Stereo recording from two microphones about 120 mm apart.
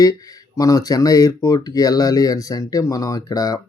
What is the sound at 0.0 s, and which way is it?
Speech, 30° left (ahead or behind).